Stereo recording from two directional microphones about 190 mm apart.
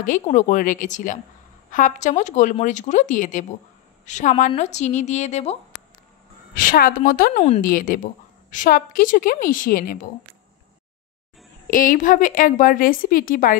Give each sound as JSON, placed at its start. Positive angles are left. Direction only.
{"t": 0.0, "sound": "a woman's voice", "side_deg": 40}
{"t": 6.5, "sound": "a woman's voice", "side_deg": 45}
{"t": 11.7, "sound": "a woman's voice", "side_deg": 45}